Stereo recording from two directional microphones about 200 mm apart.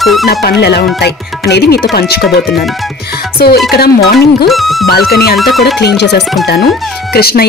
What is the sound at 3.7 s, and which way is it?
Speech, 50° left (ahead or behind).